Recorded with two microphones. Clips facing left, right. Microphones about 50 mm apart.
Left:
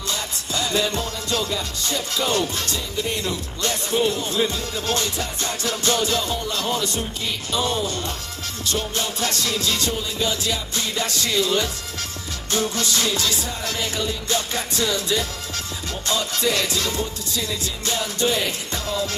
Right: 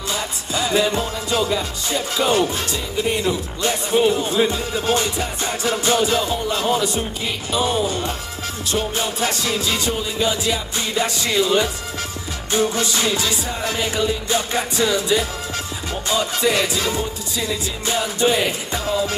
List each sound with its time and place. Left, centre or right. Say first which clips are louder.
0.1 s music: right 3 dB; centre